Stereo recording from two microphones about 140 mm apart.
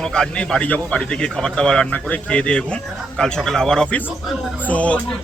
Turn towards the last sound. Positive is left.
turn(degrees=10)  # may be behind; listen again after turning